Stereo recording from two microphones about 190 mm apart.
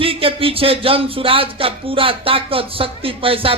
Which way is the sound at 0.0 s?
30° right (ahead or behind).